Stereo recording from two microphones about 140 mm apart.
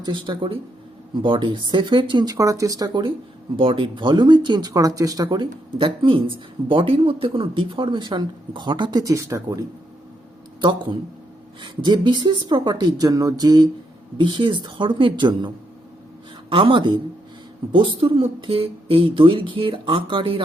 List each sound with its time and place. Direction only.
0.0 s speech: 35° right (ahead or behind)
10.6 s speech: 35° right (ahead or behind)